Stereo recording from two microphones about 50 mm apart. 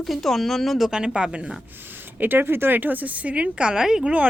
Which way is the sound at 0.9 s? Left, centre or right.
Centre.